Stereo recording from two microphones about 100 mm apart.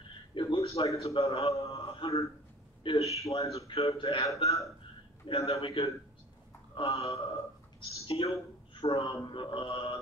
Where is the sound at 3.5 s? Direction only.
85° left.